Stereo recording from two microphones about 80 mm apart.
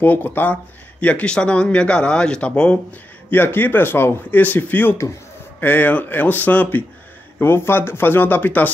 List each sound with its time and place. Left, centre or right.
0.0 s speech: left
3.3 s speech: left